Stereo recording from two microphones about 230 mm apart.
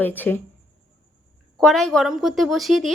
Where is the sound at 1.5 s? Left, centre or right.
Centre.